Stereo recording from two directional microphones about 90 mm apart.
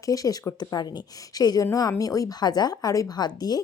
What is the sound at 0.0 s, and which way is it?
A woman's voice, 40° left (ahead or behind).